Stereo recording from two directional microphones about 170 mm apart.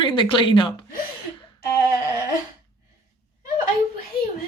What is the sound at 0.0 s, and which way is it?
Speech, 30° left (ahead or behind).